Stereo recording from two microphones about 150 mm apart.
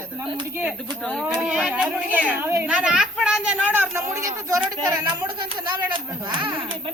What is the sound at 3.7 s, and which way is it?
Speech, 15° right (ahead or behind).